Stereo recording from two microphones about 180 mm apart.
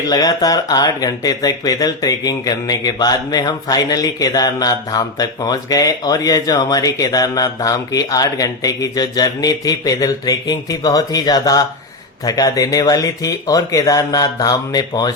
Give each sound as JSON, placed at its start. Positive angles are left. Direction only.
{"t": 0.1, "sound": "speech", "side_deg": 20}